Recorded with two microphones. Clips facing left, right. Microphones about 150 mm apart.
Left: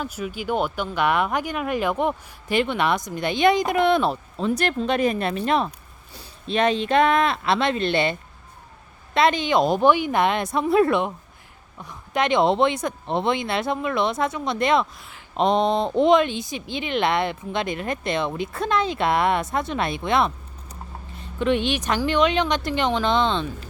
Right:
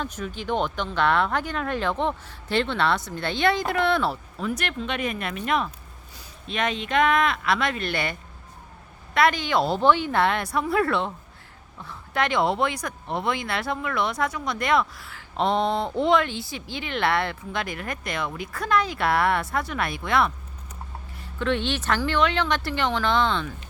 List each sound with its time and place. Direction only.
0.0 s speech: 10° left (ahead or behind); by 8.1 s 25° left (ahead or behind)
9.1 s speech: 20° left (ahead or behind)